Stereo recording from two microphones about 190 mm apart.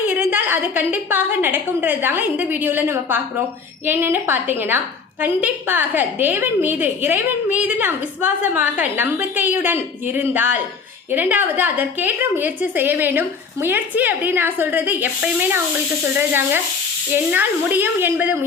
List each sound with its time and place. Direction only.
0.1 s a woman's voice: 10° right (ahead or behind)